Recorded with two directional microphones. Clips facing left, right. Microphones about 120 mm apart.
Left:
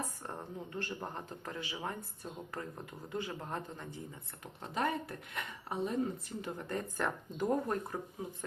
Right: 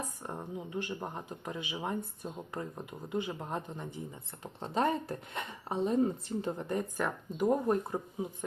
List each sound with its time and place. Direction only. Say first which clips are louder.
0.3 s speech: right 3 dB; 10° right (ahead or behind)
4.6 s speech: right 4 dB; 30° right (ahead or behind)
6.7 s speech: right 3 dB; 15° right (ahead or behind)